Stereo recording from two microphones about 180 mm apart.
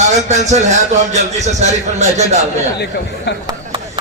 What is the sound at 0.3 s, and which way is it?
A man's voice, 40° right (ahead or behind).